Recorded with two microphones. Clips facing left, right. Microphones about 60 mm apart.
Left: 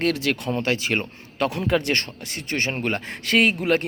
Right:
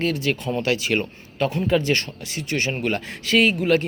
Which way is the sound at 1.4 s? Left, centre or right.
Left.